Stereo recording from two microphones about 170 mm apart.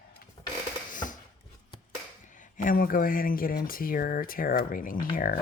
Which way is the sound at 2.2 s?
50° left (ahead or behind).